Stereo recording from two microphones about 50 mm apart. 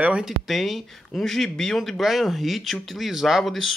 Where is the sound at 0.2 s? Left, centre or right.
Centre.